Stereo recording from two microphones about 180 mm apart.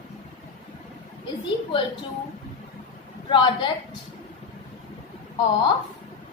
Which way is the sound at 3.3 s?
25° left (ahead or behind).